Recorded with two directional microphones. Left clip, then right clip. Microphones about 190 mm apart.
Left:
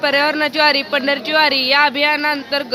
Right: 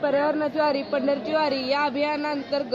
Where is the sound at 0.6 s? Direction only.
5° left (ahead or behind).